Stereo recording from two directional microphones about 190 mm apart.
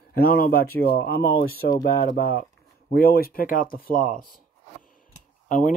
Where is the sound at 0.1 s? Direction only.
50° left (ahead or behind).